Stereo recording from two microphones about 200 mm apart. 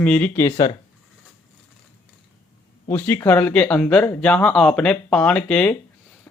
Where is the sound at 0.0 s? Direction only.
5° left (ahead or behind).